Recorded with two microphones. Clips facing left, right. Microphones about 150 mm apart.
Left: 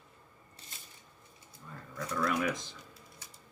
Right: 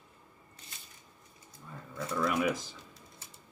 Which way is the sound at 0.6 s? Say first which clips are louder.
Even; 30° left (ahead or behind).